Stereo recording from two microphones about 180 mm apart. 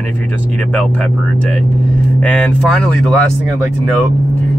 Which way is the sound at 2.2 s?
5° left (ahead or behind).